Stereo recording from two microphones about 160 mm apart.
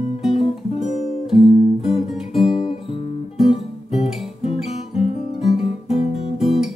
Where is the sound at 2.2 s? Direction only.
40° left (ahead or behind).